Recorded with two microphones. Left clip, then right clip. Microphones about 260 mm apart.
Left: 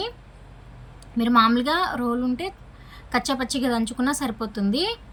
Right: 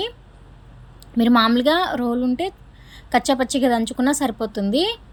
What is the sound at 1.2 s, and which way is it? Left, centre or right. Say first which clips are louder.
A woman's voice: right 2 dB; centre.